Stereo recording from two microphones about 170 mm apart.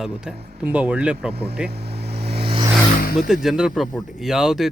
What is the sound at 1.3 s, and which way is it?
Speech, 70° right (ahead or behind).